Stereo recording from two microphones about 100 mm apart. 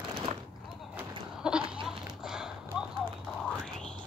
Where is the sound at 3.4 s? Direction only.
5° left (ahead or behind).